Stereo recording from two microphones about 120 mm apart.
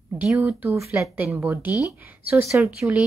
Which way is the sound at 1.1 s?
10° right (ahead or behind).